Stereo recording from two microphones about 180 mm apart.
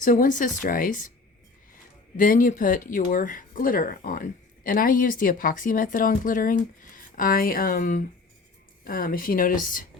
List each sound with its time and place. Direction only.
0.0 s speech: 50° left (ahead or behind)
2.1 s speech: 50° left (ahead or behind)